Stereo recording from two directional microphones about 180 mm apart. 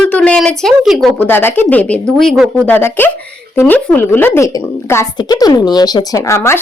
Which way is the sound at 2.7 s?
10° left (ahead or behind).